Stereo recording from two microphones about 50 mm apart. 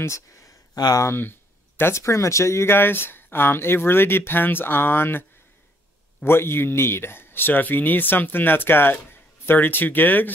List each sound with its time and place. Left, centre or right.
0.0 s speech: left
1.8 s speech: left
2.7 s speech: left
6.2 s speech: left